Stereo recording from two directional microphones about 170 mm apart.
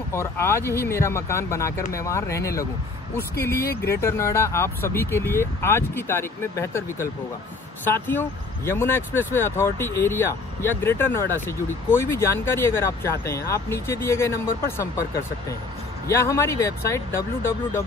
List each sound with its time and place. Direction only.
0.1 s speech: 15° left (ahead or behind)
3.6 s speech: 65° left (ahead or behind)
4.0 s speech: 15° left (ahead or behind)
16.1 s speech: 15° left (ahead or behind)